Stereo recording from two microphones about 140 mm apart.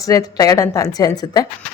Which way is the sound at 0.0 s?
25° left (ahead or behind).